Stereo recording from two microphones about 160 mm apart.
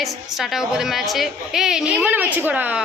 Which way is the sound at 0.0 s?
Centre (ahead or behind).